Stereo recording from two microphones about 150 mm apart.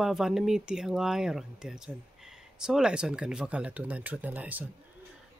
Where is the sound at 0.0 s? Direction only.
5° right (ahead or behind).